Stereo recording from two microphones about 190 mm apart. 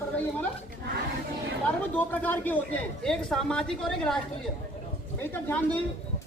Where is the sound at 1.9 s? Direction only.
10° left (ahead or behind).